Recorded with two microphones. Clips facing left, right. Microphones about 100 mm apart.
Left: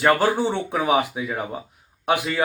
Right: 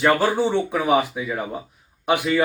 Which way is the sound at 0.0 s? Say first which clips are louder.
Even; 10° left (ahead or behind).